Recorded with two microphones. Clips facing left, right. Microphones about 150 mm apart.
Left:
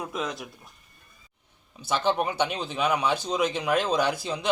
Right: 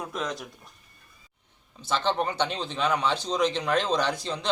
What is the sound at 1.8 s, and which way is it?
Speech, 10° left (ahead or behind).